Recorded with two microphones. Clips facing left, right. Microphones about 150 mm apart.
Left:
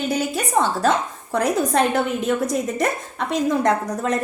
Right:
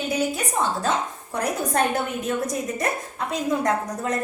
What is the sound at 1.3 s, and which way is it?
A woman's voice, 90° left.